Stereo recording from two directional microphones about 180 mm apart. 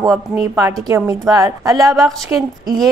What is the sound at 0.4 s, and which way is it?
A woman's voice, 20° right (ahead or behind).